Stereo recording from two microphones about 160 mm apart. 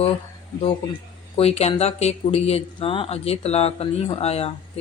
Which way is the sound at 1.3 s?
40° left (ahead or behind).